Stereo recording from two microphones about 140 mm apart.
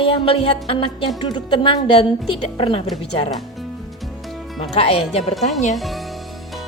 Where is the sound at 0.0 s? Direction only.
40° left (ahead or behind).